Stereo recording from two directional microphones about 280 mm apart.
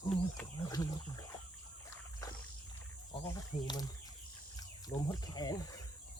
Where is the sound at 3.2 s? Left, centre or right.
Centre.